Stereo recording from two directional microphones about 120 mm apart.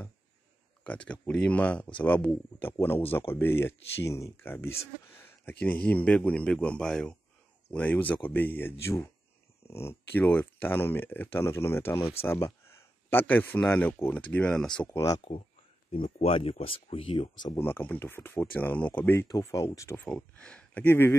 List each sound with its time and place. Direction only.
0.8 s a man's voice: 10° left (ahead or behind)
14.9 s speech: 25° left (ahead or behind)
15.9 s speech: 50° left (ahead or behind)
17.6 s speech: 15° left (ahead or behind)
20.1 s speech: 10° left (ahead or behind)